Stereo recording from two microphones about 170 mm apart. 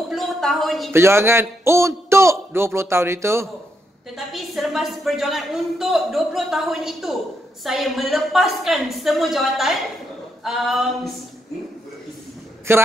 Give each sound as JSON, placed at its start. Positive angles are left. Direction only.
{"t": 0.1, "sound": "speech", "side_deg": 0}
{"t": 0.9, "sound": "a man's voice", "side_deg": -15}
{"t": 4.3, "sound": "a woman's voice", "side_deg": 0}
{"t": 12.7, "sound": "a man's voice", "side_deg": -15}